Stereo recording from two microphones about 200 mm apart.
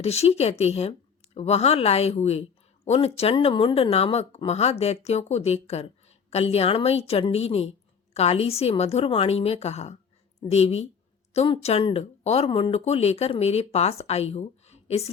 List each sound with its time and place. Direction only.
0.0 s speech: 30° left (ahead or behind)